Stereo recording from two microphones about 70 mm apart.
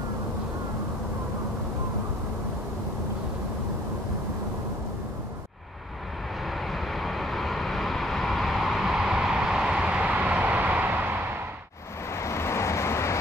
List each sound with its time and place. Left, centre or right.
6.4 s vehicle: centre; by 11.1 s right
12.1 s vehicle: left